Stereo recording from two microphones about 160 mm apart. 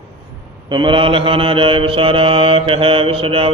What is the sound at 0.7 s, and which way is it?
Mantra, 30° right (ahead or behind).